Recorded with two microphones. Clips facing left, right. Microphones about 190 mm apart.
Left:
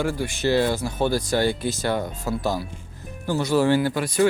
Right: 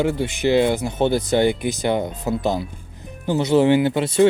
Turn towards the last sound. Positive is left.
turn(degrees=-25)  # may be behind; listen again after turning